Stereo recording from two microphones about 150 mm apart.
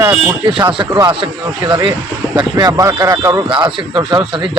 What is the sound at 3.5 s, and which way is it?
A man's voice, 35° right (ahead or behind).